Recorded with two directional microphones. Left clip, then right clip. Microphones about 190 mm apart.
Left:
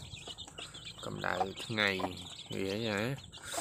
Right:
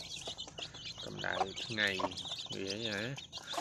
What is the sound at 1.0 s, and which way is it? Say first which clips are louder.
Speech: left 2 dB; 30° left (ahead or behind).